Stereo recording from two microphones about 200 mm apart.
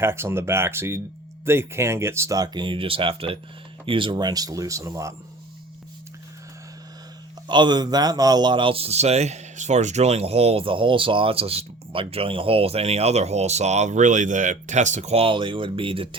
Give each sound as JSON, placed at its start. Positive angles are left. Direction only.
{"t": 0.0, "sound": "speech", "side_deg": -10}
{"t": 7.4, "sound": "speech", "side_deg": -20}